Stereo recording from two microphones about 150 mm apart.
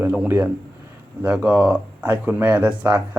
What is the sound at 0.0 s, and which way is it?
A man's voice, 15° right (ahead or behind).